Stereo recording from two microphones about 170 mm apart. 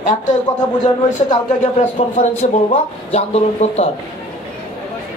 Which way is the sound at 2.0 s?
40° left (ahead or behind).